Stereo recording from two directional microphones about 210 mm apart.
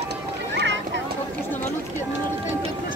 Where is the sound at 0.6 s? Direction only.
55° right (ahead or behind).